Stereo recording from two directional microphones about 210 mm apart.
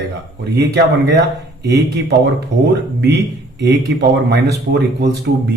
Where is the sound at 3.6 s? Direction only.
55° right (ahead or behind).